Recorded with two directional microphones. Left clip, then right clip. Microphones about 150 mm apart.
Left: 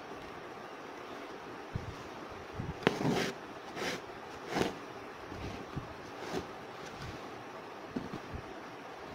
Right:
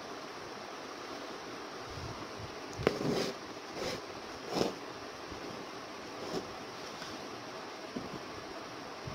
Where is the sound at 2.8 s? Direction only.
15° left (ahead or behind).